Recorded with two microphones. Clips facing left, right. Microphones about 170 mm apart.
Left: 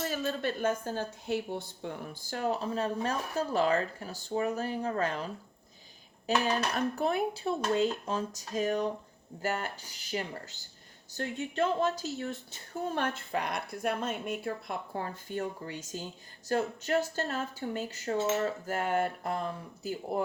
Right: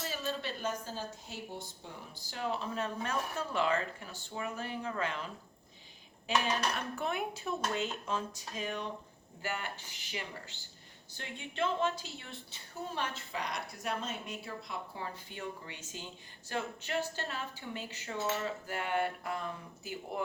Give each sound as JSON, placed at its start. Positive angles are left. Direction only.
{"t": 0.0, "sound": "a woman's voice", "side_deg": 50}